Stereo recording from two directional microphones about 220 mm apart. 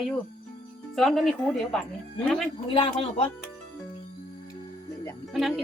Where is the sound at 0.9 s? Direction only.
Centre (ahead or behind).